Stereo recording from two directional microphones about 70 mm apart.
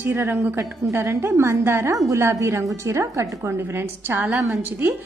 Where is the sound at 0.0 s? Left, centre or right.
Right.